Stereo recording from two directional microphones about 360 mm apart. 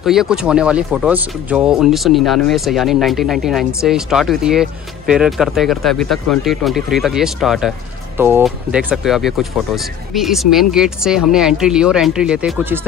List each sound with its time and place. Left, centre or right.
0.0 s speech: centre